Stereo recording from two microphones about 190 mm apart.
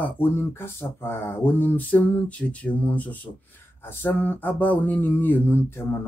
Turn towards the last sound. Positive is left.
turn(degrees=10)  # may be behind; listen again after turning